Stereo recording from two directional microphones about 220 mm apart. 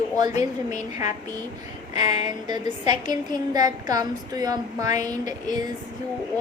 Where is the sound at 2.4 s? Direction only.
20° right (ahead or behind).